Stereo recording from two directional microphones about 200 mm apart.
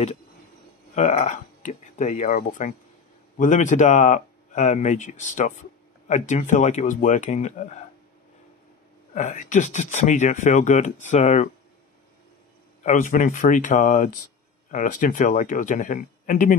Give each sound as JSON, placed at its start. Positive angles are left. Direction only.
{"t": 0.9, "sound": "speech", "side_deg": 35}
{"t": 9.1, "sound": "speech", "side_deg": 35}
{"t": 12.8, "sound": "speech", "side_deg": 40}